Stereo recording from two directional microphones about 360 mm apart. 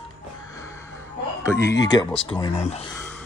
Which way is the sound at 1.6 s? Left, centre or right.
Left.